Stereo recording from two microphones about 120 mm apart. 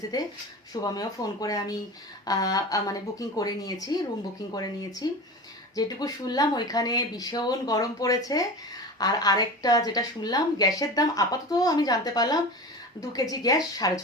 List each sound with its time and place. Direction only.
0.1 s a woman's voice: 30° left (ahead or behind)